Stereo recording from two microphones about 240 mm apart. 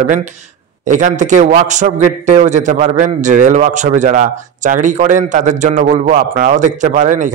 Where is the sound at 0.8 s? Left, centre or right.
Right.